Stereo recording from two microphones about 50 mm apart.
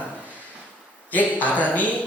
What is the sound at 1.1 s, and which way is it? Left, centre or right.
Speech, left.